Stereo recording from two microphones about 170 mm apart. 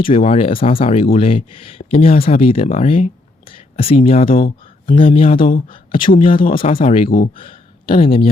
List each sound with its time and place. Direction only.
0.0 s speech: 35° left (ahead or behind)
5.4 s speech: 55° left (ahead or behind)
5.6 s speech: 30° left (ahead or behind)
7.0 s speech: 55° left (ahead or behind)
7.3 s a sound: 30° left (ahead or behind)